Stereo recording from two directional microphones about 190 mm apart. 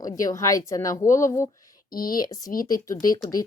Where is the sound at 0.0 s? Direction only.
20° left (ahead or behind).